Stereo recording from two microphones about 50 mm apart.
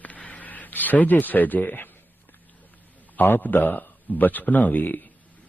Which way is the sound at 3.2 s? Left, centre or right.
Left.